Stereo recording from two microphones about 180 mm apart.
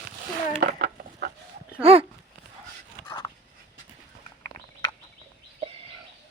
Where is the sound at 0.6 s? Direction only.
55° right (ahead or behind).